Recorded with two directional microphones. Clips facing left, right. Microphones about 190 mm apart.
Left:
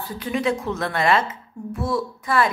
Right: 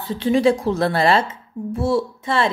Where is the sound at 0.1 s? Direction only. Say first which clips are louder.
Right 7 dB; 30° right (ahead or behind).